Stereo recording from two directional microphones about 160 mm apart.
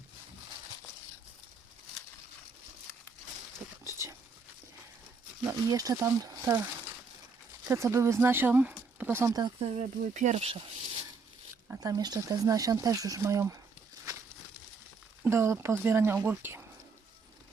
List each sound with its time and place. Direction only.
3.8 s a sound: 15° right (ahead or behind)
5.5 s speech: 20° right (ahead or behind)
7.7 s speech: 15° right (ahead or behind)
9.7 s speech: 45° right (ahead or behind)
11.7 s speech: 20° right (ahead or behind)
15.2 s speech: 15° right (ahead or behind)